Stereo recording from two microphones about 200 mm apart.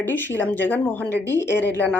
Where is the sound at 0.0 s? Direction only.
10° left (ahead or behind).